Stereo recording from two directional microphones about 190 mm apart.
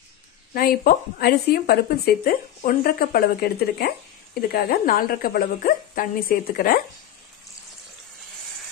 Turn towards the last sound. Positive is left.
turn(degrees=50)  # may be behind; listen again after turning